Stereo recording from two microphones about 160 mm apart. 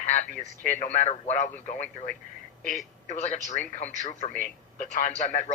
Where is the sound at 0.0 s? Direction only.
45° left (ahead or behind).